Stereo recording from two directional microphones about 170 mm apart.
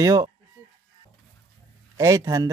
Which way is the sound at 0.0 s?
20° right (ahead or behind).